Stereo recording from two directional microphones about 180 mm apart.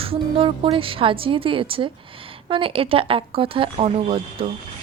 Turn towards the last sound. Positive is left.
turn(degrees=-30)  # may be behind; listen again after turning